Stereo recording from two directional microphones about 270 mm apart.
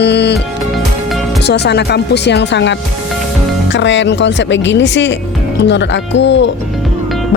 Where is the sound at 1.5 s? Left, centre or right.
Left.